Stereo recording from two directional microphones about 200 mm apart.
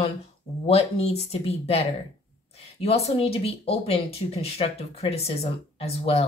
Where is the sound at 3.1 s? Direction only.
30° left (ahead or behind).